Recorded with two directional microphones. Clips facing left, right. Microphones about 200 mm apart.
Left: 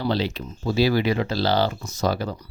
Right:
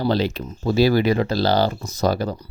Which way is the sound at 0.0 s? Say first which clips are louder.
Right 3 dB; 45° right (ahead or behind).